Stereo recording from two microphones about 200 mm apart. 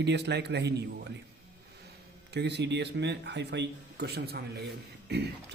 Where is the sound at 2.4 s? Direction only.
55° right (ahead or behind).